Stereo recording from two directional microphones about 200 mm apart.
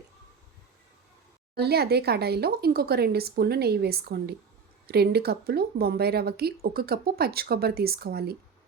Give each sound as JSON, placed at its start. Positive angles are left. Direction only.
{"t": 1.5, "sound": "a woman's voice", "side_deg": -55}